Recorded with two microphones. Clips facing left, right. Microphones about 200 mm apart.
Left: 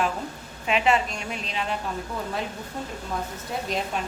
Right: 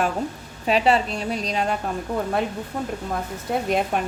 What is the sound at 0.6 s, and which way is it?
A woman's voice, 35° right (ahead or behind).